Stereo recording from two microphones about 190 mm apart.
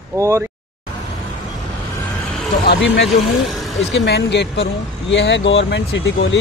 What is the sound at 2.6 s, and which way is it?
Speech, 65° left (ahead or behind).